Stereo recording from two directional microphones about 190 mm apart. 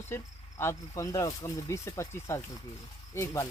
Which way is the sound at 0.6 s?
15° left (ahead or behind).